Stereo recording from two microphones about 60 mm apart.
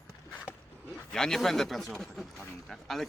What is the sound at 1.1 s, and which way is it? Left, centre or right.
Speech, centre.